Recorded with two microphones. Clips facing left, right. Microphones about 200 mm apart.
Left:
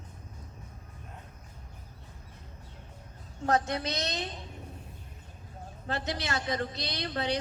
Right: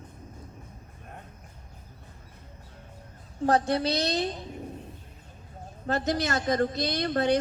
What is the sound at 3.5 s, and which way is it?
Speech, 35° right (ahead or behind).